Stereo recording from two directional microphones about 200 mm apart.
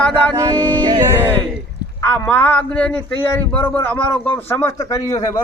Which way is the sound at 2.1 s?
10° left (ahead or behind).